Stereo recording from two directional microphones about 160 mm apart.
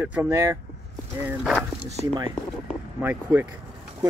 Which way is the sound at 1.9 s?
40° right (ahead or behind).